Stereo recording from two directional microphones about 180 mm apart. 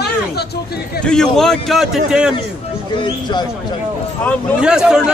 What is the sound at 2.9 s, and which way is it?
Speech, 25° left (ahead or behind).